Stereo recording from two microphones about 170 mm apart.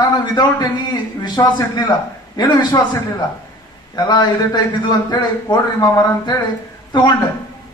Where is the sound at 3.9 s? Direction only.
25° left (ahead or behind).